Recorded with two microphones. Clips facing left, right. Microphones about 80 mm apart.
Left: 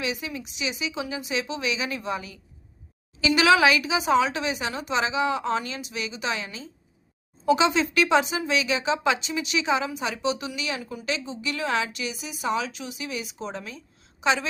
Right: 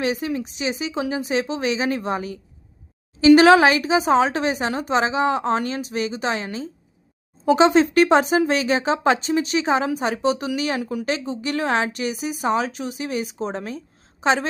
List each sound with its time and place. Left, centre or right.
0.0 s speech: right